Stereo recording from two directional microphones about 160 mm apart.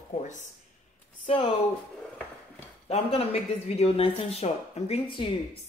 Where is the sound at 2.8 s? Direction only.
40° left (ahead or behind).